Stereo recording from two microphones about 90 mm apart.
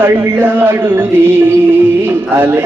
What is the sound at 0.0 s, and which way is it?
Music, 20° right (ahead or behind).